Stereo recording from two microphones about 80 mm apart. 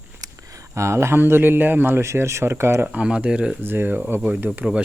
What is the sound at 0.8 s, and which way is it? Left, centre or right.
Speech, right.